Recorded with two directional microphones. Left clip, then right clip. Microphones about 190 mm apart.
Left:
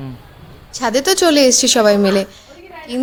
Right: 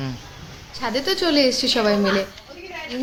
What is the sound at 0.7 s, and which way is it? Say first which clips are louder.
A woman's voice: left 8 dB; 60° left (ahead or behind).